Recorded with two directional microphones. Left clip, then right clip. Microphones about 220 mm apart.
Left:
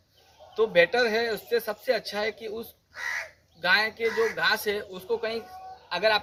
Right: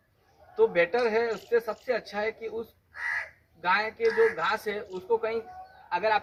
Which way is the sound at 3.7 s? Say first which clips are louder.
Left 2 dB; centre (ahead or behind).